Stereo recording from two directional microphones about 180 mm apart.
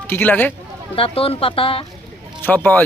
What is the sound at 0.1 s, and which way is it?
Speech, 10° left (ahead or behind).